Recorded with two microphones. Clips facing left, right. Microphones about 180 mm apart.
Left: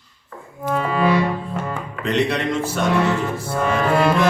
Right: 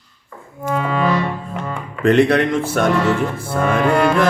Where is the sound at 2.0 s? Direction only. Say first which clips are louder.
Right 7 dB; 55° right (ahead or behind).